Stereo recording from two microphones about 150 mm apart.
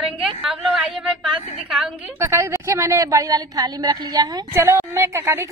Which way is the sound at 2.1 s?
15° right (ahead or behind).